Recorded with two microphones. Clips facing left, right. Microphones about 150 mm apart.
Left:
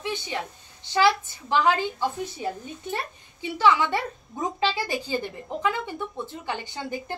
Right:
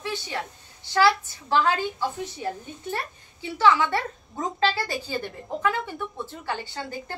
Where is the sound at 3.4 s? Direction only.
15° left (ahead or behind).